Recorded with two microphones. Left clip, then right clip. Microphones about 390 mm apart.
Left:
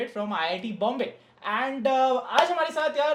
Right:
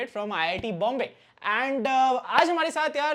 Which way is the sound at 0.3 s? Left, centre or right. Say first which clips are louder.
Right 1 dB; right.